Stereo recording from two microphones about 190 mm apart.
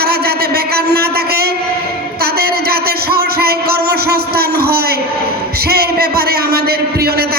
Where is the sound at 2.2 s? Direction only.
55° right (ahead or behind).